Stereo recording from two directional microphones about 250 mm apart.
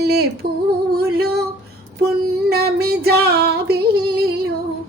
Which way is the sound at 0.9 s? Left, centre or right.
Right.